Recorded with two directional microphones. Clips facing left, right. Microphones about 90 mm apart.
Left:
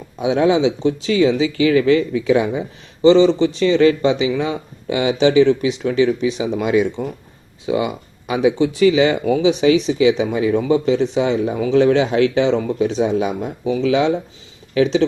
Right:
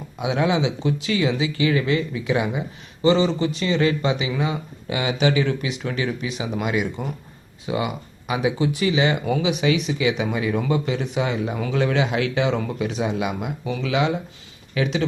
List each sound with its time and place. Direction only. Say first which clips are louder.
0.2 s speech: left 6 dB; 35° left (ahead or behind)
1.5 s speech: left 8 dB; 35° right (ahead or behind)
2.3 s speech: left 5 dB; 35° left (ahead or behind)
3.7 s speech: left 7 dB; 35° right (ahead or behind)
4.0 s speech: left 6 dB; 30° left (ahead or behind)
8.8 s speech: left 8 dB; 30° right (ahead or behind)
9.3 s speech: left 7 dB; 30° left (ahead or behind)